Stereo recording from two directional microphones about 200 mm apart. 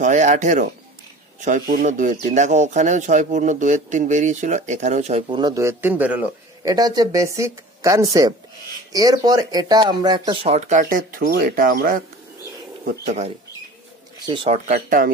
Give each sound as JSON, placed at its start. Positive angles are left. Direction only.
{"t": 0.0, "sound": "speech", "side_deg": -40}
{"t": 6.6, "sound": "speech", "side_deg": -20}
{"t": 14.2, "sound": "speech", "side_deg": -25}
{"t": 14.7, "sound": "speech", "side_deg": -45}